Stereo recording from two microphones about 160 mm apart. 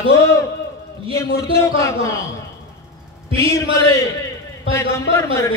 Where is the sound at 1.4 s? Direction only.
20° left (ahead or behind).